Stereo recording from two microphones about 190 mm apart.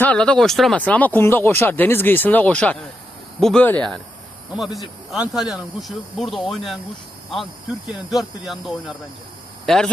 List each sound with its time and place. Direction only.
0.0 s speech: 5° left (ahead or behind)
7.9 s speech: centre (ahead or behind)